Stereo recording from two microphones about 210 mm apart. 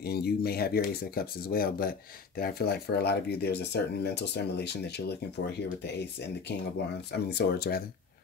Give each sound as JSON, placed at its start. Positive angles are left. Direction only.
{"t": 0.0, "sound": "speech", "side_deg": 50}
{"t": 7.1, "sound": "speech", "side_deg": 50}